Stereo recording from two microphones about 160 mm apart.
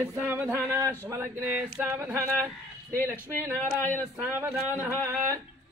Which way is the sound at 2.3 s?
15° right (ahead or behind).